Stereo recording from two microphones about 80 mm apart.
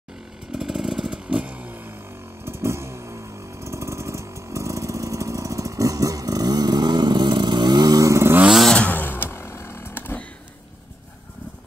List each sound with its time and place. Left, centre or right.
0.5 s chainsaw: centre; by 2.0 s right
2.4 s motorcycle: right
8.1 s vehicle: right
8.5 s motorcycle: centre
8.7 s vehicle: centre